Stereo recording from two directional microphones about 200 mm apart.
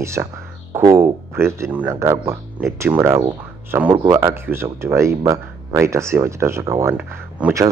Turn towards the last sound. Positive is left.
turn(degrees=-5)  # may be behind; listen again after turning